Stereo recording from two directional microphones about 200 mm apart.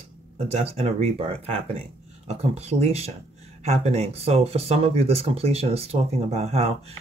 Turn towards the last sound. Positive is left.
turn(degrees=-30)  # may be behind; listen again after turning